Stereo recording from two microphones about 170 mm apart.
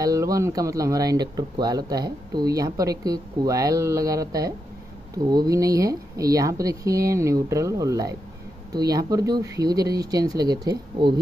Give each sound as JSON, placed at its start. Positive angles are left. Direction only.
{"t": 0.0, "sound": "speech", "side_deg": -20}